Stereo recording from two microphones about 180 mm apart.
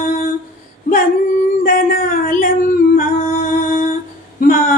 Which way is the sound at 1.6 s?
50° left (ahead or behind).